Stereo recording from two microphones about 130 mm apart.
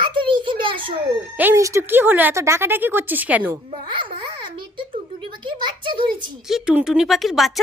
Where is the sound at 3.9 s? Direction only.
40° right (ahead or behind).